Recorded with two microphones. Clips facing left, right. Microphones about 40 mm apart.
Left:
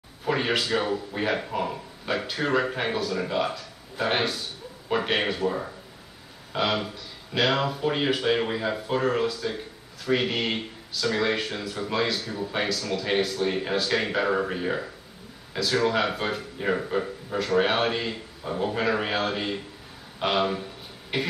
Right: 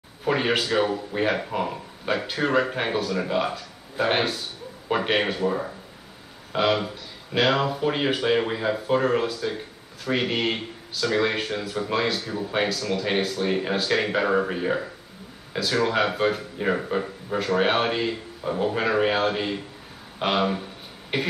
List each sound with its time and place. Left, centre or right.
0.2 s speech: centre